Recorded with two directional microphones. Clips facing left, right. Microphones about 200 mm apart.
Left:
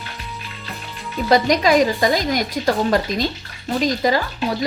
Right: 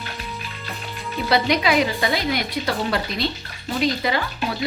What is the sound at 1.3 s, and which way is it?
Speech, 40° left (ahead or behind).